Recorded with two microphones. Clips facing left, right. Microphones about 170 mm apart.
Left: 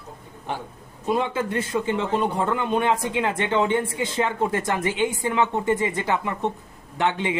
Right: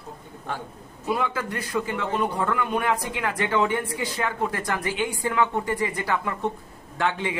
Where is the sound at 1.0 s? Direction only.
25° left (ahead or behind).